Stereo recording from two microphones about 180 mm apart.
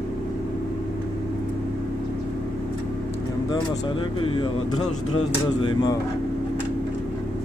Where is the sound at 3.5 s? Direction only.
25° left (ahead or behind).